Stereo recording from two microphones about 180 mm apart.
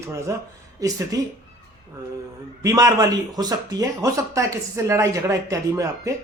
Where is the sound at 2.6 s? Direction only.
20° right (ahead or behind).